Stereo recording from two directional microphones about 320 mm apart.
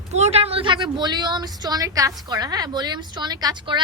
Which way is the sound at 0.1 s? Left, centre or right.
Centre.